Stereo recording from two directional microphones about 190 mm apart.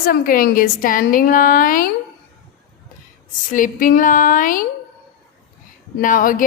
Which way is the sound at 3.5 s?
45° left (ahead or behind).